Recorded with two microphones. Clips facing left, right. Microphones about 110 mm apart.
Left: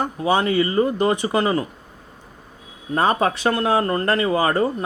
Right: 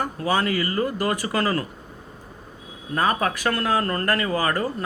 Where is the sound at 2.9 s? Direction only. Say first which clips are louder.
Left 4 dB; 25° left (ahead or behind).